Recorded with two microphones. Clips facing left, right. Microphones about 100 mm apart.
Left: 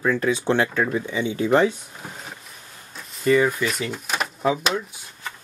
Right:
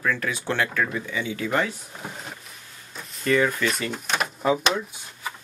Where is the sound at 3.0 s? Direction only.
Centre (ahead or behind).